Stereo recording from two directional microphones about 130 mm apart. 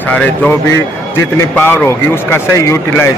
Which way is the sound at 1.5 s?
20° left (ahead or behind).